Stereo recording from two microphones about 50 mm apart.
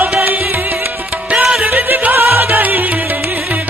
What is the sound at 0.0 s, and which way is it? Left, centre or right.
Music, right.